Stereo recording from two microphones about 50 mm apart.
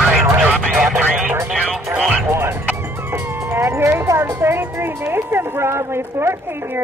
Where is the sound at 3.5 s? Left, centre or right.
Right.